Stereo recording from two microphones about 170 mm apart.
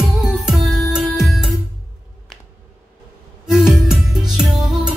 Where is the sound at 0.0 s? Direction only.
Centre (ahead or behind).